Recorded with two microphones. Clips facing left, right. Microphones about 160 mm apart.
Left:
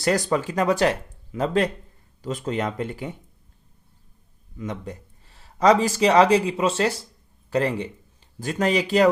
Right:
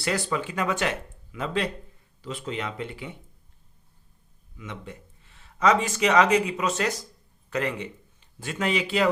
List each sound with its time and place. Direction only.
0.0 s speech: 40° left (ahead or behind)
4.5 s speech: 40° left (ahead or behind)